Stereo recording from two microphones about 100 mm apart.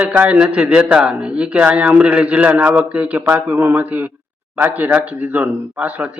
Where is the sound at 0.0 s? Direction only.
10° right (ahead or behind).